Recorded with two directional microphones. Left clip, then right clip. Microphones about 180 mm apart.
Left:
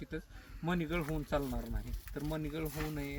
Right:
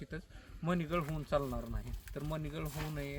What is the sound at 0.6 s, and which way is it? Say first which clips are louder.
Speech: even; 15° right (ahead or behind).